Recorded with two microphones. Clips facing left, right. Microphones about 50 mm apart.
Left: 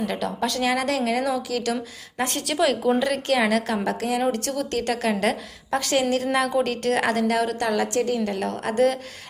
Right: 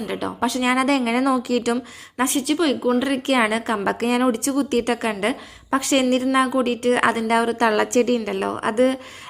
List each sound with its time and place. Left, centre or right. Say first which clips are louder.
0.1 s a woman's voice: right 1 dB; centre
0.6 s a woman's voice: right 4 dB; right
1.7 s a woman's voice: right 4 dB; centre
2.4 s a woman's voice: even; centre
3.0 s a woman's voice: right 2 dB; right
3.8 s a woman's voice: right 4 dB; right
4.2 s a woman's voice: right 4 dB; right
5.2 s a woman's voice: even; centre
5.8 s a woman's voice: right 3 dB; right
6.5 s a woman's voice: right 3 dB; centre; by 7.7 s right
7.7 s a woman's voice: right 4 dB; right